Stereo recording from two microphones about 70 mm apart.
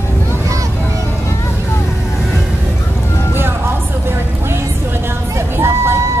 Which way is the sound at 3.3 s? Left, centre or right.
Right.